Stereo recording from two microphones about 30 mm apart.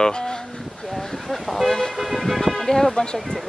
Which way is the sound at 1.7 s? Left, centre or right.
Centre.